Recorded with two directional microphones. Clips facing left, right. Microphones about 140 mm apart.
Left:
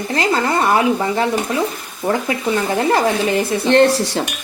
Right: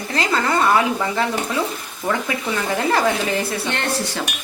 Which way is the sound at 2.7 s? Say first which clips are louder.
Left 1 dB; 30° left (ahead or behind).